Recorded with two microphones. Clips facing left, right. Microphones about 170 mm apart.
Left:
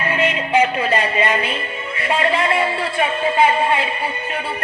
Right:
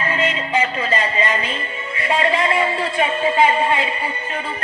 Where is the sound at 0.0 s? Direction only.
10° left (ahead or behind).